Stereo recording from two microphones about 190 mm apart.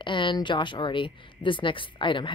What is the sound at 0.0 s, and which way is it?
Speech, 25° left (ahead or behind).